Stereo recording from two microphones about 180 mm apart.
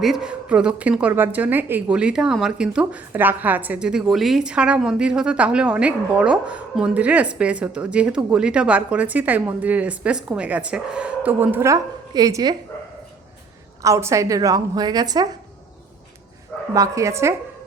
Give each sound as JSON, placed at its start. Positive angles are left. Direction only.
{"t": 0.0, "sound": "a woman's voice", "side_deg": -5}
{"t": 13.8, "sound": "a woman's voice", "side_deg": -15}
{"t": 16.7, "sound": "a woman's voice", "side_deg": -15}